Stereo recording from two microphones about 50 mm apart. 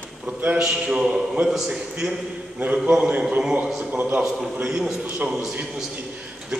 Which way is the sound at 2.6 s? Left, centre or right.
Right.